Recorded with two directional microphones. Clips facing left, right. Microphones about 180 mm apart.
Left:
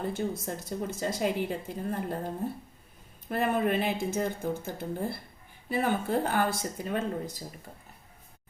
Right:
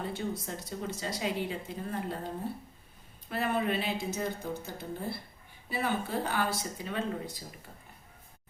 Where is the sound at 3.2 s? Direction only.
50° left (ahead or behind).